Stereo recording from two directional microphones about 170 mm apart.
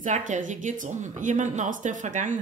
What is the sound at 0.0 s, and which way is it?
A woman's voice, 45° right (ahead or behind).